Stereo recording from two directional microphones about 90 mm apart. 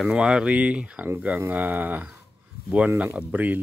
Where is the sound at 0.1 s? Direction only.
10° right (ahead or behind).